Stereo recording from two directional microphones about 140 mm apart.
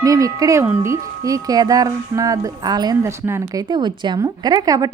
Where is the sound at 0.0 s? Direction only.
25° right (ahead or behind).